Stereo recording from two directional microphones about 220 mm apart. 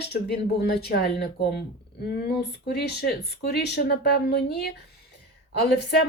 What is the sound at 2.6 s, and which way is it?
Speech, 45° left (ahead or behind).